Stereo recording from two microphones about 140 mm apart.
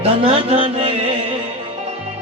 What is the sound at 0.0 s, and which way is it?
Mantra, 45° right (ahead or behind).